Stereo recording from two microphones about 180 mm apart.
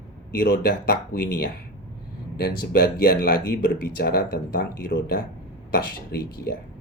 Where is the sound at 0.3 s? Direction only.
60° left (ahead or behind).